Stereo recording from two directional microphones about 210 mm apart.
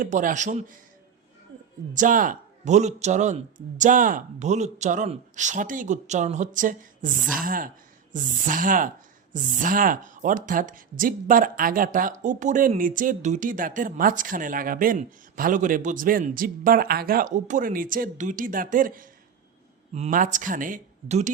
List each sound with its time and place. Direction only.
0.0 s speech: 40° right (ahead or behind)
1.9 s speech: 40° right (ahead or behind)